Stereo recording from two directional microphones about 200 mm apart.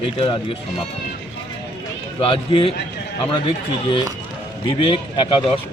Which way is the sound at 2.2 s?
25° left (ahead or behind).